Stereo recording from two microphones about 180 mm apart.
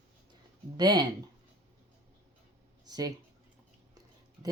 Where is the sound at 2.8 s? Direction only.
20° right (ahead or behind).